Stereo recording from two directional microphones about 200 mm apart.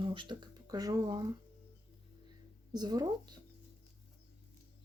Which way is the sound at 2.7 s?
20° right (ahead or behind).